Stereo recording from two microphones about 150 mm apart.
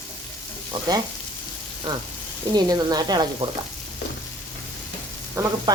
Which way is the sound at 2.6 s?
25° right (ahead or behind).